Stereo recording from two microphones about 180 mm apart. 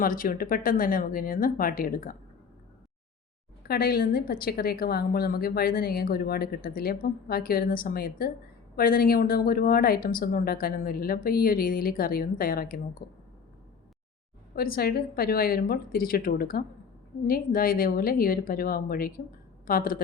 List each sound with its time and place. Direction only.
0.0 s a woman's voice: 50° left (ahead or behind)
3.6 s a woman's voice: 55° left (ahead or behind)
14.5 s a woman's voice: 55° left (ahead or behind)